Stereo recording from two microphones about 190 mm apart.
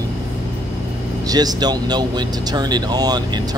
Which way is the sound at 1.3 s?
20° right (ahead or behind).